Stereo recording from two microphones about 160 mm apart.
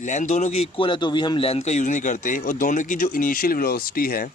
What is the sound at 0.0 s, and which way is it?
A man's voice, 50° left (ahead or behind).